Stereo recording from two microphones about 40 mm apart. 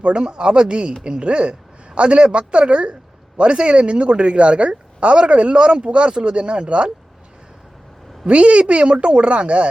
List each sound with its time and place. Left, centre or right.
0.0 s a woman's voice: right
8.3 s speech: right